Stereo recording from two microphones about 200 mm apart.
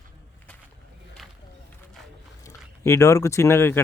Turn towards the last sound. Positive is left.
turn(degrees=10)  # may be behind; listen again after turning